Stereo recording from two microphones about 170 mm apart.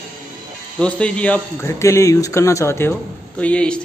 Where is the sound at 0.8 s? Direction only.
5° left (ahead or behind).